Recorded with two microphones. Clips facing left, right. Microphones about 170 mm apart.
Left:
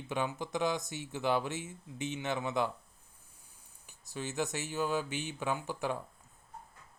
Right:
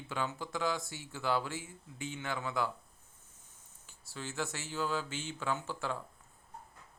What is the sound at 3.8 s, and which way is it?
Speech, 20° left (ahead or behind).